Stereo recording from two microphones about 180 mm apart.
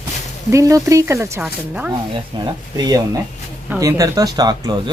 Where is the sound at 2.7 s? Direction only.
20° right (ahead or behind).